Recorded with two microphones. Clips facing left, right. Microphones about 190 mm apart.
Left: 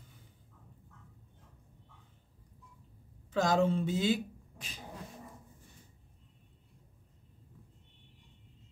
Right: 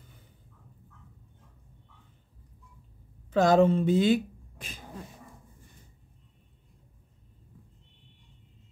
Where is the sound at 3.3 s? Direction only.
60° right (ahead or behind).